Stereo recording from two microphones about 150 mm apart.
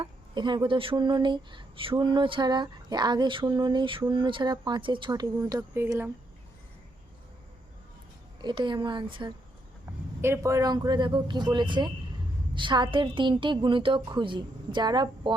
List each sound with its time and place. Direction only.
0.0 s speech: 30° right (ahead or behind)
8.4 s speech: 30° right (ahead or behind)
10.2 s speech: 15° right (ahead or behind)